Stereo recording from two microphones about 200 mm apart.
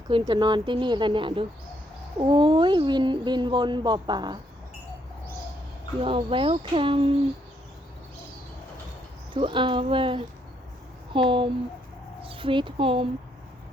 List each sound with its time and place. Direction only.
0.1 s speech: 25° right (ahead or behind)
6.0 s speech: 25° right (ahead or behind)
9.3 s speech: 25° right (ahead or behind)